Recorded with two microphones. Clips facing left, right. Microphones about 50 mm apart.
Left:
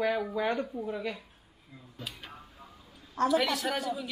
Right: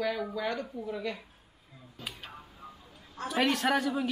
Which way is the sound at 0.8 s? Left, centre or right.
Centre.